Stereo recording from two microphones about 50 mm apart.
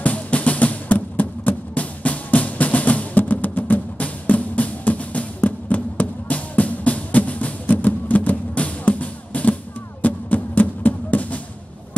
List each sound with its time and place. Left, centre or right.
0.0 s music: left